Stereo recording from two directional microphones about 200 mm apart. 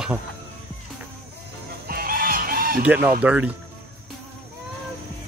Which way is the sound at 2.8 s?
10° right (ahead or behind).